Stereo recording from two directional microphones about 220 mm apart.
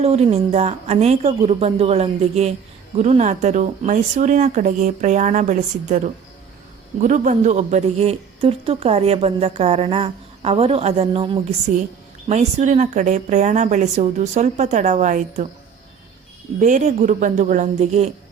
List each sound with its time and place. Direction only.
0.0 s speech: 30° right (ahead or behind)
16.6 s speech: 35° right (ahead or behind)